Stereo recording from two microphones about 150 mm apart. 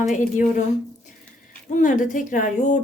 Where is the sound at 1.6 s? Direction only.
55° left (ahead or behind).